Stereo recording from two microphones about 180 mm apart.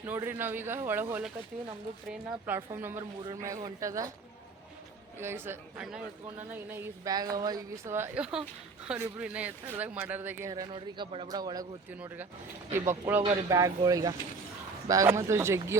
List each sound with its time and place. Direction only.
0.0 s speech: 10° right (ahead or behind)
2.7 s speech: 10° right (ahead or behind)
5.2 s speech: 15° right (ahead or behind)
11.9 s speech: 10° right (ahead or behind)